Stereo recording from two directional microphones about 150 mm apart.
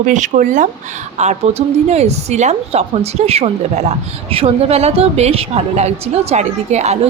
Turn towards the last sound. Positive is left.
turn(degrees=-50)  # may be behind; listen again after turning